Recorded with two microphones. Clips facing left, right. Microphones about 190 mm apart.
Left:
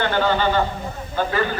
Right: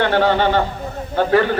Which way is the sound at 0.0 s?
65° right (ahead or behind).